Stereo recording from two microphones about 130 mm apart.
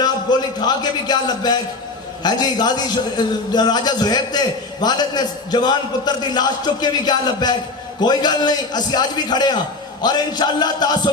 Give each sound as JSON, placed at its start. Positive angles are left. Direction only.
{"t": 0.0, "sound": "a man's voice", "side_deg": 30}